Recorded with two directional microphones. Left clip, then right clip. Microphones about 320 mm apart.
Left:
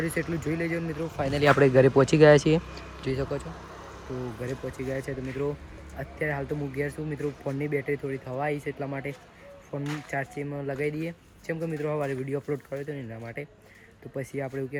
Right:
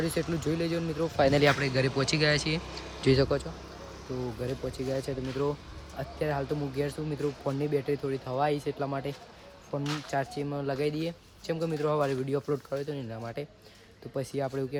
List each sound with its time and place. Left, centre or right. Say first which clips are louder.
0.0 s speech: left 1 dB; centre
1.1 s speech: right 7 dB; right
1.4 s speech: left 6 dB; centre
3.2 s speech: right 4 dB; right
4.9 s speech: even; centre